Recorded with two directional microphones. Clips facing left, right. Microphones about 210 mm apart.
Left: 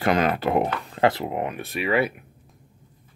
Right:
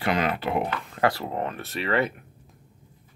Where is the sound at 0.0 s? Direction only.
45° left (ahead or behind).